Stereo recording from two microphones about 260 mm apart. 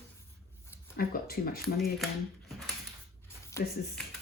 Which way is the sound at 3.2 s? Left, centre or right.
Centre.